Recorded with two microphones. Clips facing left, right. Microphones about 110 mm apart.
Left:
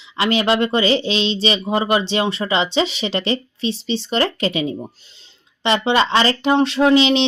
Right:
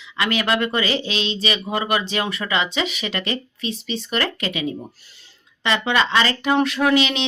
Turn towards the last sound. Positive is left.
turn(degrees=30)  # may be behind; listen again after turning